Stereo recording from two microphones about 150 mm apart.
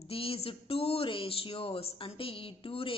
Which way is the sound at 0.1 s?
40° left (ahead or behind).